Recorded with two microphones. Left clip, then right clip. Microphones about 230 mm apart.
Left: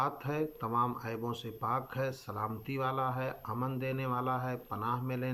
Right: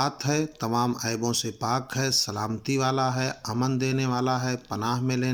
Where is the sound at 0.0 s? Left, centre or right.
Right.